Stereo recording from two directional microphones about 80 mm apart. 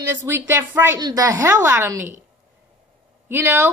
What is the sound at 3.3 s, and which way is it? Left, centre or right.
Speech, right.